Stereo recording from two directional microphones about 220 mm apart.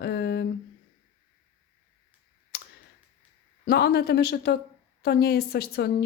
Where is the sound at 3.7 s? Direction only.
45° left (ahead or behind).